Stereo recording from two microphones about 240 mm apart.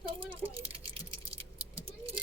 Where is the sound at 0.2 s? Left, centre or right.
Right.